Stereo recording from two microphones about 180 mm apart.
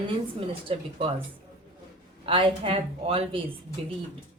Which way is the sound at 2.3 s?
30° right (ahead or behind).